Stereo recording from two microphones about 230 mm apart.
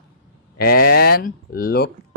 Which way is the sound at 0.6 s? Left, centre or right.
Left.